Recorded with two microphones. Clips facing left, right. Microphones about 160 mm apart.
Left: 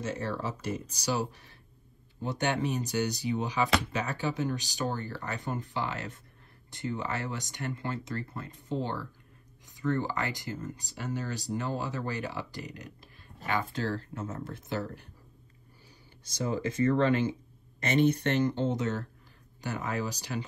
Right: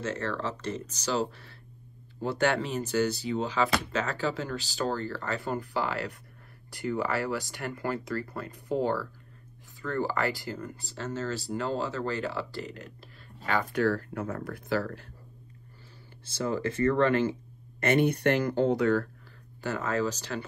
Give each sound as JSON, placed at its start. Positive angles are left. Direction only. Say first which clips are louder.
{"t": 0.0, "sound": "speech", "louder": "right 2 dB", "side_deg": 10}
{"t": 9.8, "sound": "speech", "louder": "right 1 dB", "side_deg": 20}
{"t": 14.1, "sound": "speech", "louder": "right 4 dB", "side_deg": -60}
{"t": 14.4, "sound": "speech", "louder": "right 5 dB", "side_deg": 25}
{"t": 16.8, "sound": "speech", "louder": "right 1 dB", "side_deg": -60}
{"t": 18.7, "sound": "speech", "louder": "right 6 dB", "side_deg": 20}